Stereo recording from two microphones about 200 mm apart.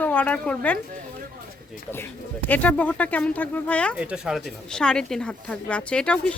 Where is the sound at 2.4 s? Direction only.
10° left (ahead or behind).